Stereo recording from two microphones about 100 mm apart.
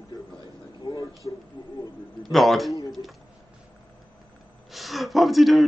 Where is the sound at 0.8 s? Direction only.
40° left (ahead or behind).